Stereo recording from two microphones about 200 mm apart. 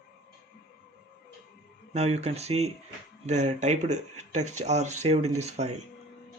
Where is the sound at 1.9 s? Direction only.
35° right (ahead or behind).